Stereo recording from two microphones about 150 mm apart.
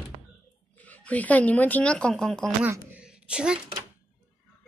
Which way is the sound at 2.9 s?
5° right (ahead or behind).